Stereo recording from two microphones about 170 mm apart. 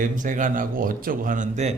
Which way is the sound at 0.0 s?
50° right (ahead or behind).